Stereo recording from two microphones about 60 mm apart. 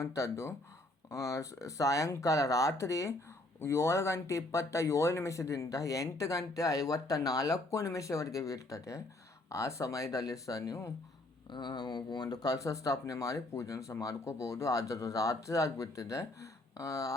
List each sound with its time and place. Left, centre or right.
0.0 s speech: left
12.3 s speech: left